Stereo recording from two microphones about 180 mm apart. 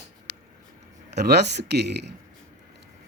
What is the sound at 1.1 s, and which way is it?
Speech, 65° right (ahead or behind).